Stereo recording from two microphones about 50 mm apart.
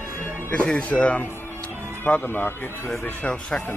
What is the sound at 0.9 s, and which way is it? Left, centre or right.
Speech, left.